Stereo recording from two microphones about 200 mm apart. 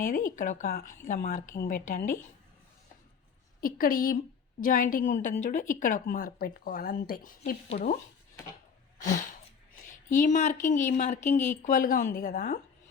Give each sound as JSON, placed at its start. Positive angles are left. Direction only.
{"t": 0.0, "sound": "a woman's voice", "side_deg": 45}
{"t": 3.6, "sound": "a woman's voice", "side_deg": 45}
{"t": 7.7, "sound": "speech", "side_deg": 35}
{"t": 9.8, "sound": "speech", "side_deg": 40}